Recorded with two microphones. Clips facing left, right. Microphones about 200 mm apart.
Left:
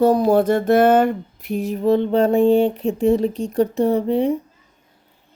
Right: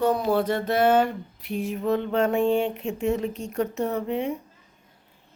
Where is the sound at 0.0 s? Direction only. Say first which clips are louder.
Left 7 dB; 40° left (ahead or behind).